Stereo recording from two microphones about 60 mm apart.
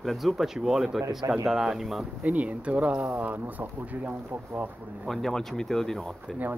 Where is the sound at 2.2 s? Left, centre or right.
Right.